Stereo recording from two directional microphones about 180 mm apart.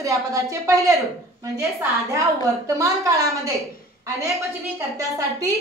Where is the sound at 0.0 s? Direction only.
15° right (ahead or behind).